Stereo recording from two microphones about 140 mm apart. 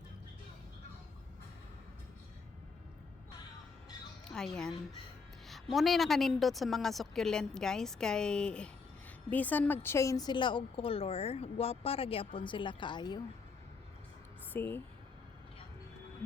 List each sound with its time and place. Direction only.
4.3 s a woman's voice: 5° left (ahead or behind)
5.7 s a woman's voice: centre (ahead or behind); by 13.2 s 30° left (ahead or behind)
14.5 s speech: 15° left (ahead or behind)